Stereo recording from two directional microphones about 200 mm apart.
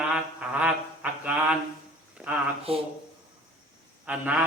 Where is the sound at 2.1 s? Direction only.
5° right (ahead or behind).